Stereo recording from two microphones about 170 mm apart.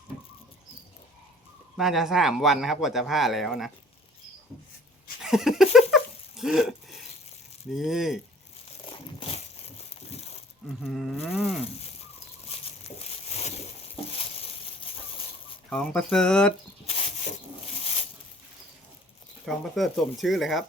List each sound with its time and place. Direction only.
1.7 s speech: centre (ahead or behind)
5.2 s dog: centre (ahead or behind)
7.7 s speech: centre (ahead or behind)
8.9 s crumpling: 35° left (ahead or behind)
10.7 s speech: centre (ahead or behind)
12.5 s a sound: 35° left (ahead or behind)
15.7 s speech: 5° left (ahead or behind)
16.8 s a sound: 40° left (ahead or behind)
19.5 s speech: centre (ahead or behind)